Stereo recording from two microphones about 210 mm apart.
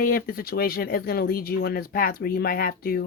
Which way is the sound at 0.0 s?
45° left (ahead or behind).